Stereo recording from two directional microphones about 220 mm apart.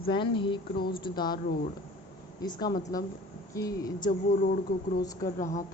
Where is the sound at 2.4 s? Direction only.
20° left (ahead or behind).